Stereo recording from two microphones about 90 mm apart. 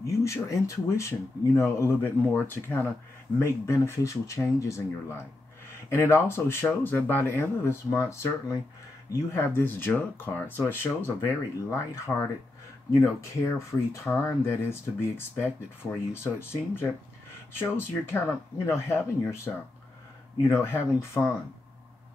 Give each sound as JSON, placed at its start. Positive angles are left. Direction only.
{"t": 0.0, "sound": "speech", "side_deg": 35}
{"t": 20.6, "sound": "speech", "side_deg": 30}